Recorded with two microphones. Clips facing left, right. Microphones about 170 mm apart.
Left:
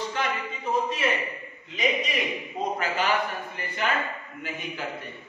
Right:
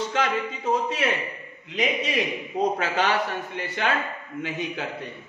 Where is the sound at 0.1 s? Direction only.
85° right.